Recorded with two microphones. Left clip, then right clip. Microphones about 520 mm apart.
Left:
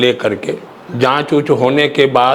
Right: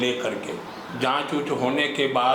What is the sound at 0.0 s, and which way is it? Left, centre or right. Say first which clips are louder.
A man's voice: left 11 dB; left.